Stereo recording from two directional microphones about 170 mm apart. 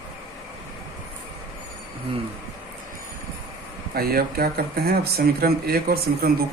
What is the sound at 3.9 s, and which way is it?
Speech, 65° right (ahead or behind).